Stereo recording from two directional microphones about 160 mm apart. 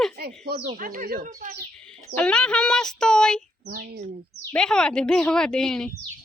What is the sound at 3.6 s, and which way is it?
Speech, 70° right (ahead or behind).